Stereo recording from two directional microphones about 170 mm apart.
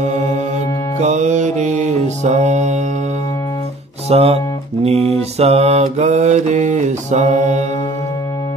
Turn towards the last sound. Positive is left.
turn(degrees=-45)  # may be behind; listen again after turning